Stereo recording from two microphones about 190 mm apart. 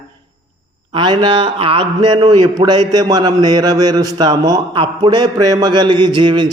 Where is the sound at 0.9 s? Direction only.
25° right (ahead or behind).